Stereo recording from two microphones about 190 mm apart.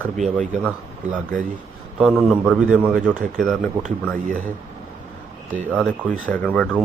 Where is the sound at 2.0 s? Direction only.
Centre (ahead or behind).